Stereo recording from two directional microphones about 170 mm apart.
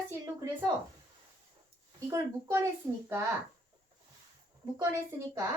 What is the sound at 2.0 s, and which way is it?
Speech, 15° right (ahead or behind).